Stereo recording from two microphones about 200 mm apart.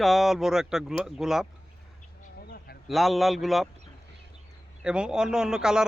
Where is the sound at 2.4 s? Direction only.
50° left (ahead or behind).